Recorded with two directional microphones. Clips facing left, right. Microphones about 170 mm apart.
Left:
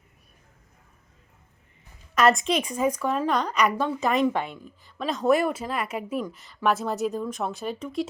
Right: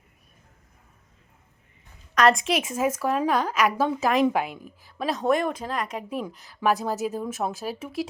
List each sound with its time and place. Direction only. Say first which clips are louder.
2.1 s a woman's voice: even; centre (ahead or behind)